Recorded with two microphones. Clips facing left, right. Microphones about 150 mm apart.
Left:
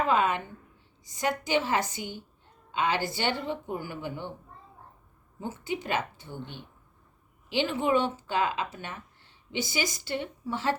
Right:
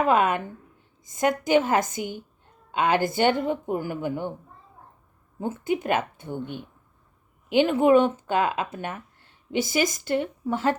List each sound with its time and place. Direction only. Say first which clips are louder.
0.1 s speech: right 4 dB; 50° right (ahead or behind)
5.4 s speech: right 7 dB; 50° right (ahead or behind)